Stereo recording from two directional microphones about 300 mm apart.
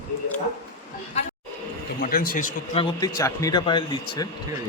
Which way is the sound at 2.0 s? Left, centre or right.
Left.